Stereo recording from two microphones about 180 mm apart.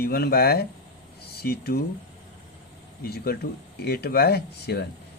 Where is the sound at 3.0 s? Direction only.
60° left (ahead or behind).